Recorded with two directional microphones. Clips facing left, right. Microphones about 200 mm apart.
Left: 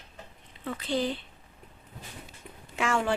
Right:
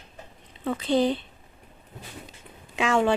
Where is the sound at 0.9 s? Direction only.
20° right (ahead or behind).